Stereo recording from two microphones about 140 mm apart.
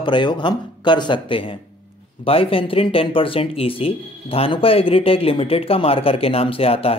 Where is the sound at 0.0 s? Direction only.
35° left (ahead or behind).